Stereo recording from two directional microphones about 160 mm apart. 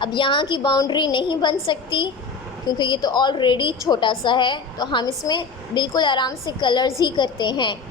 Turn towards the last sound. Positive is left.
turn(degrees=30)  # may be behind; listen again after turning